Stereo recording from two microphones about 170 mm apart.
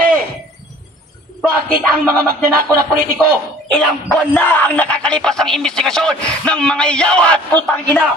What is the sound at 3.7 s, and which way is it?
Speech, 10° left (ahead or behind).